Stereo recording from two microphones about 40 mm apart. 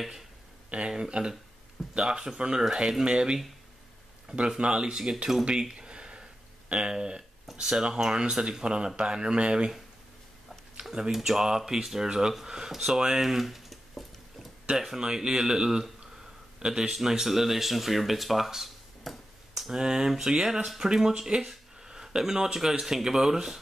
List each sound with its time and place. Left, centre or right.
0.7 s speech: right
0.9 s speech: centre
5.4 s a sound: right
6.7 s speech: right
10.8 s speech: centre
14.8 s speech: centre
19.7 s speech: centre